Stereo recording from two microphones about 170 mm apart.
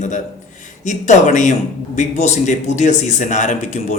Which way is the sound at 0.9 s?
45° left (ahead or behind).